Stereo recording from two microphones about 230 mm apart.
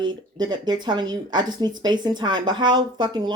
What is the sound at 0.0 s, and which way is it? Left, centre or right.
Speech, centre.